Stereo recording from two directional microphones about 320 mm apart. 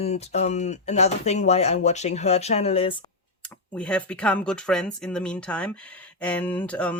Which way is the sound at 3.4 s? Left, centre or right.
Centre.